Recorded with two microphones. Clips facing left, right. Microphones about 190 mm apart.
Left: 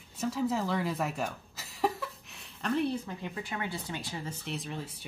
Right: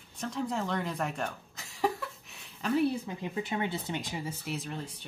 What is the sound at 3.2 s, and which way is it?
Speech, 20° right (ahead or behind).